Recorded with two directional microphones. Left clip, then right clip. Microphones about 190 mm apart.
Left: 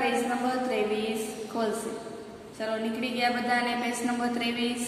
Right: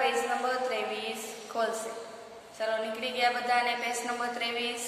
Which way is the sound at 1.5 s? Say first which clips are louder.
Even; 15° right (ahead or behind).